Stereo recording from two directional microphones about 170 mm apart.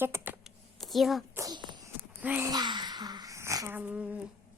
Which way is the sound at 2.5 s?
25° right (ahead or behind).